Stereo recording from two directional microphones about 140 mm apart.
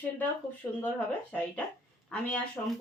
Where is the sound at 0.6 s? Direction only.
20° left (ahead or behind).